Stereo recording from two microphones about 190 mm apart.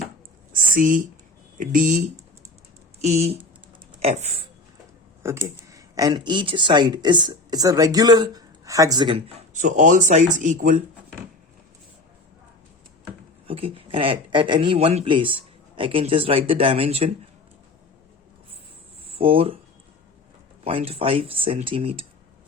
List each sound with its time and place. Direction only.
0.5 s a sound: 45° right (ahead or behind)
1.5 s speech: 45° right (ahead or behind)
5.2 s speech: 15° right (ahead or behind)
9.6 s speech: 40° right (ahead or behind)
13.5 s speech: 30° right (ahead or behind)
19.0 s speech: 30° right (ahead or behind)
20.7 s speech: 30° right (ahead or behind)